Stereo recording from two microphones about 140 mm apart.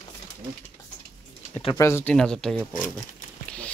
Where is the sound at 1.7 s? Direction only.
20° left (ahead or behind).